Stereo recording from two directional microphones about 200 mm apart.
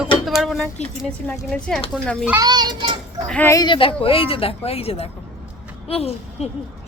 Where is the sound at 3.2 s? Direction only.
10° left (ahead or behind); by 5.1 s 30° left (ahead or behind).